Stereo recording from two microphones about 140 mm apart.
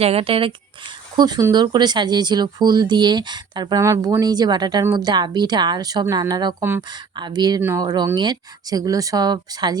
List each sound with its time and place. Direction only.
0.0 s speech: 45° right (ahead or behind)
1.1 s speech: 30° right (ahead or behind)